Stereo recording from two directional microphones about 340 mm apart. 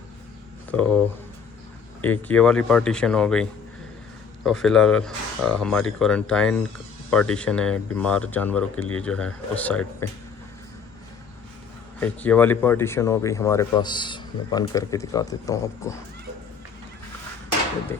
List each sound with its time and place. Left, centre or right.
2.0 s speech: centre
11.9 s speech: centre